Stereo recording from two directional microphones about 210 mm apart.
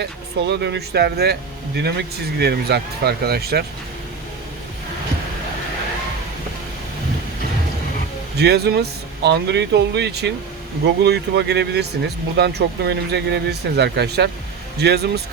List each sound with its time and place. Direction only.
0.0 s speech: 50° right (ahead or behind)
8.4 s speech: 50° right (ahead or behind)